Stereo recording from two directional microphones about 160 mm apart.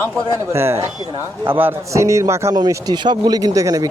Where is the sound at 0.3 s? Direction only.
15° right (ahead or behind).